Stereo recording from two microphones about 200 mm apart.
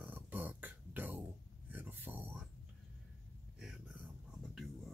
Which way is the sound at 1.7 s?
10° right (ahead or behind).